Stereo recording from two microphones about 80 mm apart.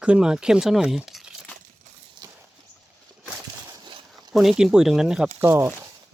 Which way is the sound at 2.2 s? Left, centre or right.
Right.